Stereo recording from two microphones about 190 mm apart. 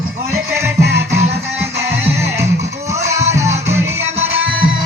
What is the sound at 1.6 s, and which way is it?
Music, 15° right (ahead or behind).